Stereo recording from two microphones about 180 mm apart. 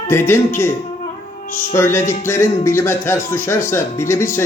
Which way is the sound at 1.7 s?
15° left (ahead or behind).